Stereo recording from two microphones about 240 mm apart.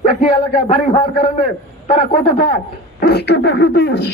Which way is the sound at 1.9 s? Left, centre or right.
Left.